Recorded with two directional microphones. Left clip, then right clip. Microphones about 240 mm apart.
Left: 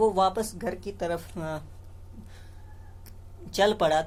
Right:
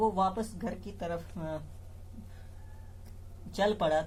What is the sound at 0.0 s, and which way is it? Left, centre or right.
Speech, left.